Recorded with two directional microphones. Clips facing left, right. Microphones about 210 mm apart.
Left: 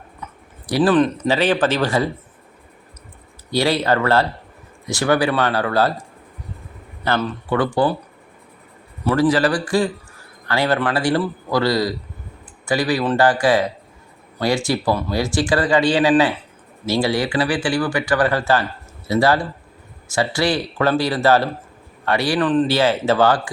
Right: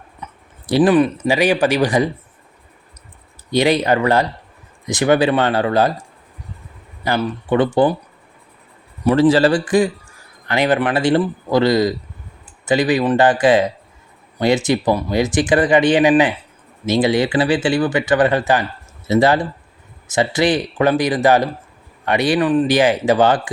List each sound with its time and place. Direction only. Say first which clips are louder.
0.2 s a sound: right 1 dB; 20° right (ahead or behind)
0.7 s speech: right 2 dB; 15° right (ahead or behind)
3.5 s speech: right 3 dB; 20° right (ahead or behind)
7.0 s speech: right 1 dB; 15° right (ahead or behind)
9.0 s speech: right 4 dB; 25° right (ahead or behind)